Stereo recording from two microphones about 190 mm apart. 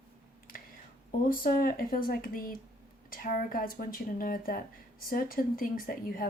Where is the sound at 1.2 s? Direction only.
50° left (ahead or behind).